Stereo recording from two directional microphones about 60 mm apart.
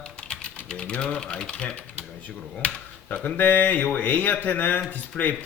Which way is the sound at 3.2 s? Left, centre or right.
Left.